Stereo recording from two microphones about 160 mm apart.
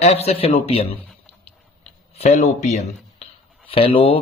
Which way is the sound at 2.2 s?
45° left (ahead or behind).